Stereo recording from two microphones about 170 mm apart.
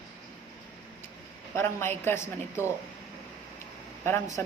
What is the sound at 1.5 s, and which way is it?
A woman's voice, 15° left (ahead or behind).